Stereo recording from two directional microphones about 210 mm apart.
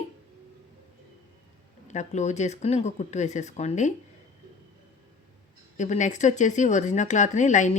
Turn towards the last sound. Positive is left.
turn(degrees=35)  # may be behind; listen again after turning